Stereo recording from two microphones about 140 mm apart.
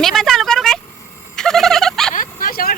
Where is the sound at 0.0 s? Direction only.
Centre (ahead or behind).